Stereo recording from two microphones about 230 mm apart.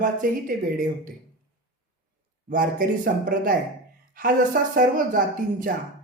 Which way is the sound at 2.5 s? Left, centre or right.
Right.